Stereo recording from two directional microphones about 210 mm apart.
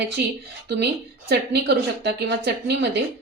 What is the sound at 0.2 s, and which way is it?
A woman's voice, 45° right (ahead or behind).